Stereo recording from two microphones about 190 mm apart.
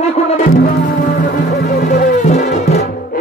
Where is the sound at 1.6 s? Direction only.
55° left (ahead or behind).